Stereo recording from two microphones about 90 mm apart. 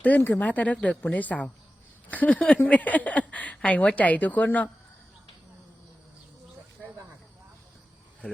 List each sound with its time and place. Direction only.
0.2 s speech: 20° left (ahead or behind)